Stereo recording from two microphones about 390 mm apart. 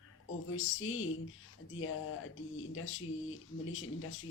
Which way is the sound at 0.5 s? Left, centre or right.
Left.